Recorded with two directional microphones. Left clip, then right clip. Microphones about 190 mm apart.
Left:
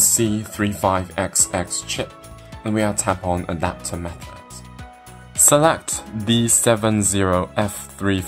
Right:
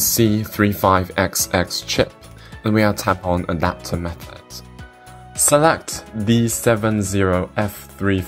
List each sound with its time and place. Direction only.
0.0 s speech: 15° right (ahead or behind)
5.4 s speech: 10° right (ahead or behind)